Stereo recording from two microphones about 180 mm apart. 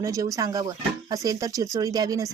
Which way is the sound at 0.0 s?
20° right (ahead or behind).